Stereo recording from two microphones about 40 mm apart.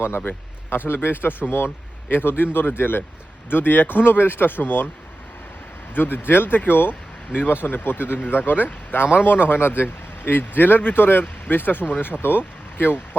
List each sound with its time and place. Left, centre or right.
0.9 s speech: left
5.9 s speech: left